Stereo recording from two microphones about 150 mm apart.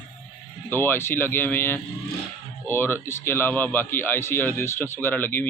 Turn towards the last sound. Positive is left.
turn(degrees=15)  # may be behind; listen again after turning